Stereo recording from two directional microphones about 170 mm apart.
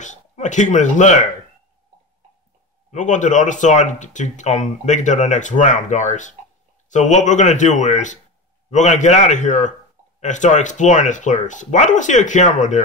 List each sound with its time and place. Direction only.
0.0 s speech: 45° left (ahead or behind)
2.9 s speech: 45° left (ahead or behind)